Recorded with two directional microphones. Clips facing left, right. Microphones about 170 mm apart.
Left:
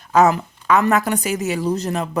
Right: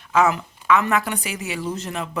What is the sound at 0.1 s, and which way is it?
A woman's voice, 40° left (ahead or behind).